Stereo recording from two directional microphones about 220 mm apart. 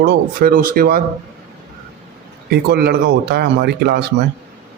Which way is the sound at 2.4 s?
45° right (ahead or behind).